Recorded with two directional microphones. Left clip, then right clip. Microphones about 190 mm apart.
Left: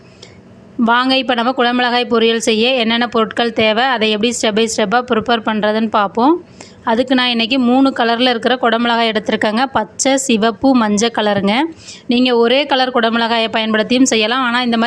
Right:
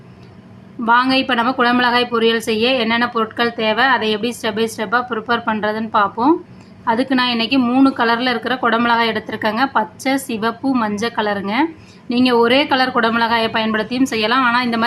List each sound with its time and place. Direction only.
0.9 s a woman's voice: 40° left (ahead or behind)